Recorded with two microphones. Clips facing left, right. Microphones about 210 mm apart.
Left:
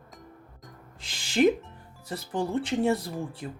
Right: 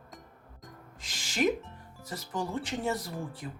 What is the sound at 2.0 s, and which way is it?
Speech, 30° left (ahead or behind).